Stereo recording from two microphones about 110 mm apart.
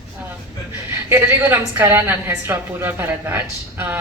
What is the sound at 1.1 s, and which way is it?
A woman's voice, 20° right (ahead or behind).